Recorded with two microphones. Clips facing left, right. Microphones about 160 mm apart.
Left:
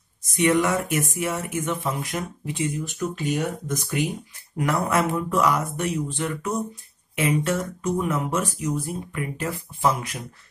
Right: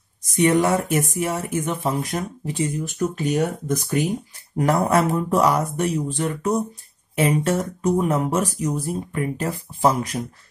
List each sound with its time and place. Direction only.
0.2 s speech: 35° right (ahead or behind)